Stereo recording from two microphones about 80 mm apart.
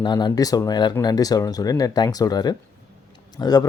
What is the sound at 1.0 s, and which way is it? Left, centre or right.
Speech, left.